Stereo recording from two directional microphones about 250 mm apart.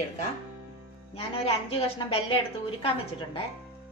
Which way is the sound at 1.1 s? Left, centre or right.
Left.